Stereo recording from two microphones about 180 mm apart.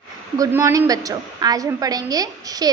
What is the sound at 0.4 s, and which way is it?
A woman's voice, 15° right (ahead or behind).